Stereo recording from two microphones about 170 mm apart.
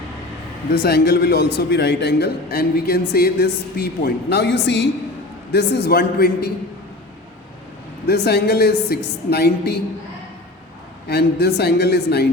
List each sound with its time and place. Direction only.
0.7 s a man's voice: 70° left (ahead or behind); by 4.9 s 90° left
5.5 s a man's voice: 70° left (ahead or behind)
8.0 s a man's voice: 70° left (ahead or behind)
11.1 s a man's voice: 70° left (ahead or behind)